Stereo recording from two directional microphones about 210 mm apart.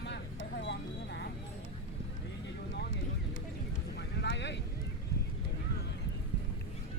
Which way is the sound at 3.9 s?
55° left (ahead or behind).